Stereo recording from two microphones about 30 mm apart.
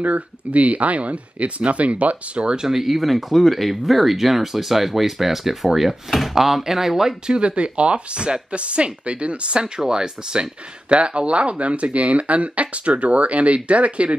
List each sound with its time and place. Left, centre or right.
0.0 s speech: right
2.7 s speech: centre
7.2 s speech: right
9.8 s speech: right
10.9 s speech: right